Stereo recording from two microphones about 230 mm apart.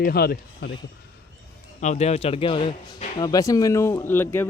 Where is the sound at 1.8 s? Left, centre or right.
Left.